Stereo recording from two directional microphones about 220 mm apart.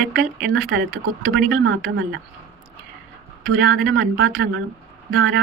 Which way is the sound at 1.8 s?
50° right (ahead or behind).